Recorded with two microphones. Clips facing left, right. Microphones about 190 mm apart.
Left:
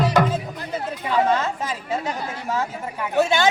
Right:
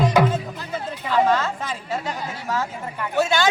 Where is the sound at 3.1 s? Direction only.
20° left (ahead or behind).